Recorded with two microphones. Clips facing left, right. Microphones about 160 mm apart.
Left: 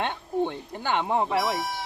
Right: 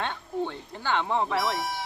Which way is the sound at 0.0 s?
20° left (ahead or behind).